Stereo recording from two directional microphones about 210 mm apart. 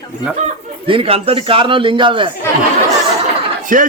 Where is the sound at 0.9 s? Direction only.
25° right (ahead or behind).